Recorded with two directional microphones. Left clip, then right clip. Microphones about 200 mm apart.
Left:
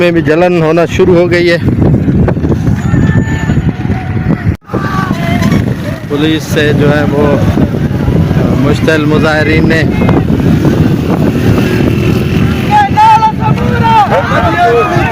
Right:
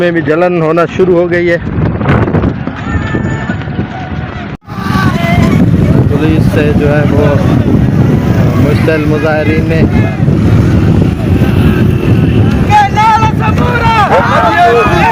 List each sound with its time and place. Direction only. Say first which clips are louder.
0.0 s speech: left 1 dB; 25° left (ahead or behind)
6.2 s speech: left 4 dB; 10° left (ahead or behind)
8.9 s speech: left 3 dB; 15° left (ahead or behind)
12.7 s vehicle: left 2 dB; 35° right (ahead or behind)
14.1 s vehicle: right 2 dB; 5° left (ahead or behind)